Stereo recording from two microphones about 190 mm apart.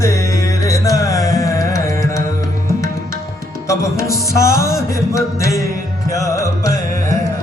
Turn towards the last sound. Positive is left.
turn(degrees=20)  # may be behind; listen again after turning